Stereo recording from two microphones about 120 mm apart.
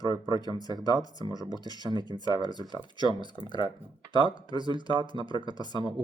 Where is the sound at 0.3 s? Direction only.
35° right (ahead or behind).